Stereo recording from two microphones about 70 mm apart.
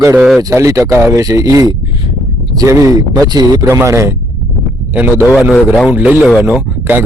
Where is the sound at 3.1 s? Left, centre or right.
Right.